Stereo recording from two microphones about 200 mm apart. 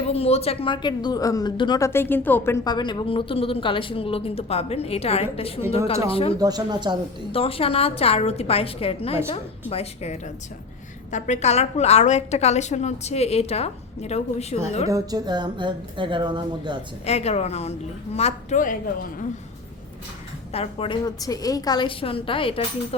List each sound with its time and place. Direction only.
0.1 s a woman's voice: 30° left (ahead or behind)
6.4 s speech: 20° right (ahead or behind)
7.3 s a woman's voice: 30° left (ahead or behind)
14.8 s speech: 20° right (ahead or behind)
17.1 s a woman's voice: 30° left (ahead or behind)
20.5 s a woman's voice: 30° left (ahead or behind)